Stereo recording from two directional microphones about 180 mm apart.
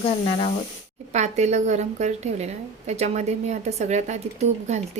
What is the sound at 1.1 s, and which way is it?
A woman's voice, 40° right (ahead or behind).